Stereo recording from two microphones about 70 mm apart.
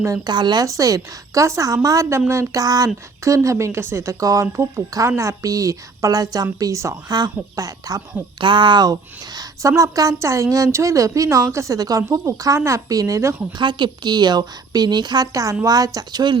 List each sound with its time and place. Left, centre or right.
0.3 s a woman's voice: right
0.6 s a woman's voice: right
2.6 s a woman's voice: right
4.5 s a woman's voice: right
7.1 s speech: right
8.6 s a woman's voice: right
13.6 s a woman's voice: right
15.3 s a woman's voice: right
15.6 s a woman's voice: right